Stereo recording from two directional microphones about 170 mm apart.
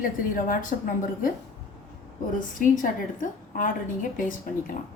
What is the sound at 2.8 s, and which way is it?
A woman's voice, 50° left (ahead or behind).